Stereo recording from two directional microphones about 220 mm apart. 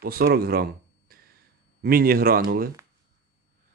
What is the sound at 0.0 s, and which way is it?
Speech, 45° right (ahead or behind).